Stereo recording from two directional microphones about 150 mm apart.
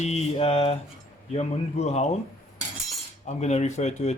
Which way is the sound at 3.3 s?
45° left (ahead or behind).